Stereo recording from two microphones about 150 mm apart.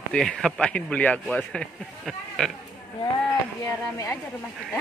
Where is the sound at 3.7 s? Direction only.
20° left (ahead or behind).